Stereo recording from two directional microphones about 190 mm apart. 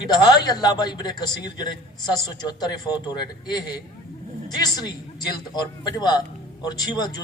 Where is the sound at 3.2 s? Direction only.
20° left (ahead or behind).